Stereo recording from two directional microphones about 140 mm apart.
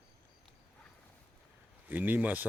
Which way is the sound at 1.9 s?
10° right (ahead or behind).